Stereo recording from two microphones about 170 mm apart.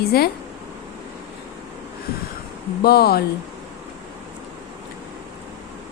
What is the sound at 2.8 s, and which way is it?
Speech, 65° left (ahead or behind).